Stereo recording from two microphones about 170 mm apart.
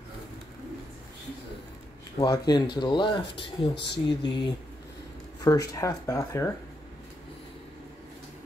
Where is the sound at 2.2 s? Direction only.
25° left (ahead or behind).